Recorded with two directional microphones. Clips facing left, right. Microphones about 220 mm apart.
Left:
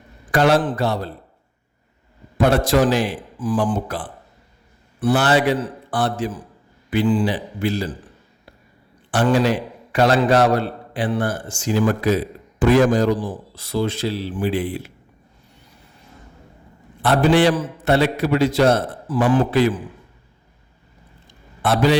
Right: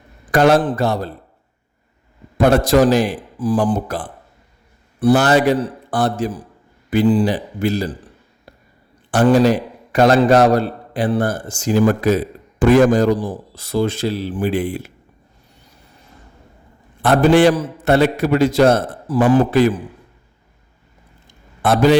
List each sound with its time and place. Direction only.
0.3 s a man's voice: 45° right (ahead or behind)
2.4 s a man's voice: 45° right (ahead or behind)
9.1 s a man's voice: 40° right (ahead or behind)
17.0 s a man's voice: 45° right (ahead or behind)
21.6 s a man's voice: 45° right (ahead or behind)